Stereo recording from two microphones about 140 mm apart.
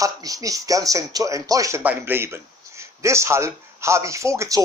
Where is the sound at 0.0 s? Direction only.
25° right (ahead or behind).